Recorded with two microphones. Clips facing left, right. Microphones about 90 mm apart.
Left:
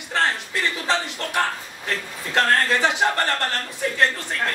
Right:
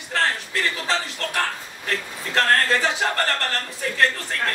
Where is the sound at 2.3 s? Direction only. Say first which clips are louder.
Even; 15° left (ahead or behind).